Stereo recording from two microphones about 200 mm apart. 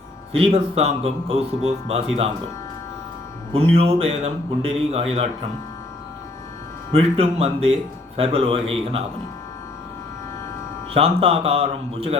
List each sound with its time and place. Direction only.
0.3 s speech: 30° right (ahead or behind)
3.5 s speech: 30° right (ahead or behind)
6.9 s speech: 30° right (ahead or behind)
10.9 s speech: 30° right (ahead or behind)